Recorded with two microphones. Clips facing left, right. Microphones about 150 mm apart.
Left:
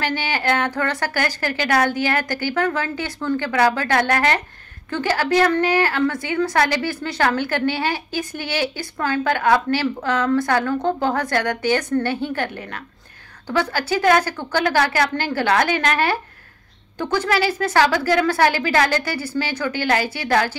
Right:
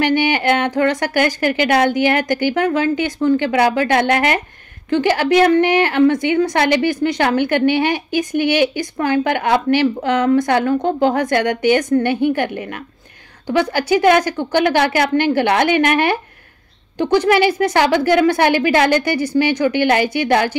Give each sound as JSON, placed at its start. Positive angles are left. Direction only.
{"t": 0.0, "sound": "a woman's voice", "side_deg": -15}